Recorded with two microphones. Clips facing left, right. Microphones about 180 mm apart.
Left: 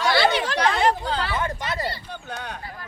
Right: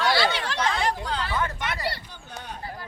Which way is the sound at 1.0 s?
30° left (ahead or behind).